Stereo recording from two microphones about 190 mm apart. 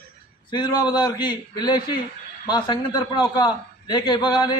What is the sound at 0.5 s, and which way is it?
A man's voice, 20° left (ahead or behind).